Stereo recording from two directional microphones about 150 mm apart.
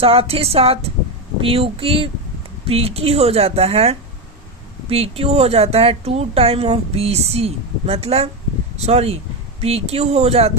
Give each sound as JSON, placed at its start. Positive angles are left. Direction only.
{"t": 0.0, "sound": "speech", "side_deg": -40}